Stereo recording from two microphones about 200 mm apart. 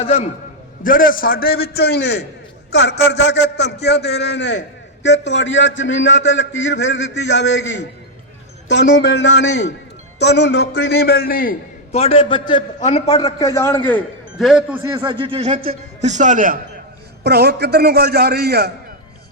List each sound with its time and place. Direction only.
0.0 s a man's voice: 30° left (ahead or behind)
0.8 s a man's voice: 45° left (ahead or behind)
11.9 s a man's voice: 30° left (ahead or behind)
12.8 s a man's voice: 35° left (ahead or behind)
13.1 s a man's voice: 15° left (ahead or behind)
14.3 s speech: 5° right (ahead or behind)
14.9 s a man's voice: 25° right (ahead or behind); by 16.6 s 40° right (ahead or behind)
17.2 s a man's voice: 55° right (ahead or behind)